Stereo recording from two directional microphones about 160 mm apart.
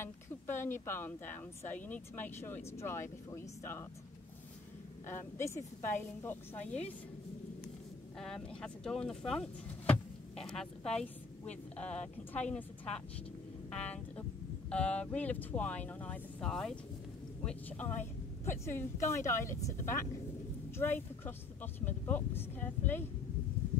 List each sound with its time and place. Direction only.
0.0 s speech: 15° left (ahead or behind)
5.0 s speech: 15° left (ahead or behind)
8.2 s speech: 5° left (ahead or behind)